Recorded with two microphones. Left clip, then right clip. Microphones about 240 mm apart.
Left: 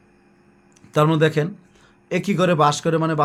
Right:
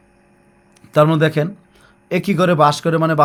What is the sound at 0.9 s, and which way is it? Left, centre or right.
Speech, centre.